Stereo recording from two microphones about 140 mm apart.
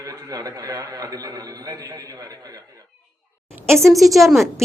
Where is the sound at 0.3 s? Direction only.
25° right (ahead or behind).